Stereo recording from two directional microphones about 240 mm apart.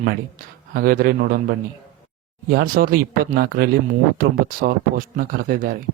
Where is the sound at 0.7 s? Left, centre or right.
Right.